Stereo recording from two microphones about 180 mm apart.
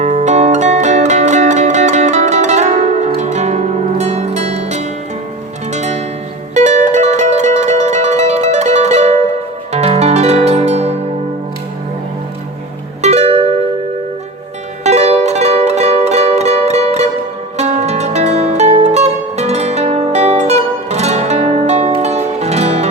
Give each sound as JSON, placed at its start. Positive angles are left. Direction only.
{"t": 0.0, "sound": "music", "side_deg": -40}
{"t": 13.0, "sound": "music", "side_deg": -35}
{"t": 14.8, "sound": "music", "side_deg": -35}